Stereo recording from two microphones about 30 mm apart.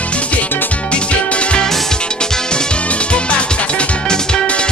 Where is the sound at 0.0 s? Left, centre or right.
Left.